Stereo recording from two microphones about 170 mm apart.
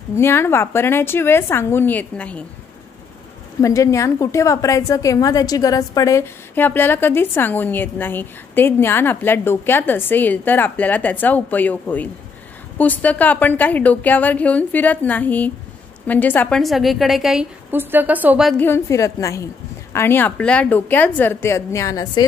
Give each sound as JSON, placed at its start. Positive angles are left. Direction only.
{"t": 0.1, "sound": "a woman's voice", "side_deg": 15}
{"t": 3.6, "sound": "a woman's voice", "side_deg": 20}
{"t": 18.5, "sound": "a woman's voice", "side_deg": 10}